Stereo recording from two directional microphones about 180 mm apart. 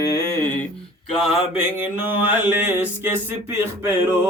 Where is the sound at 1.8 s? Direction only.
10° right (ahead or behind).